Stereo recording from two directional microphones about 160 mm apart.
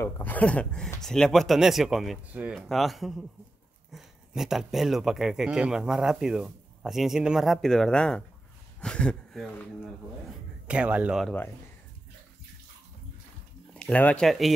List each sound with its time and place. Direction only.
0.0 s speech: 10° left (ahead or behind)
10.7 s speech: 10° right (ahead or behind)
11.2 s speech: 15° left (ahead or behind)
13.7 s speech: 10° left (ahead or behind)